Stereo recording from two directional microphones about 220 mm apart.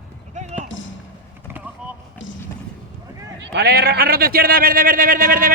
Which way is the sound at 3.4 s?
50° right (ahead or behind).